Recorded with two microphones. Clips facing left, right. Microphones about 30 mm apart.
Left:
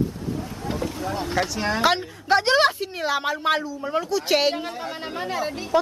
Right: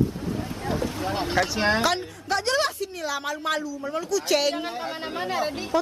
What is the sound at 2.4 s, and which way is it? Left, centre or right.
A woman's voice, left.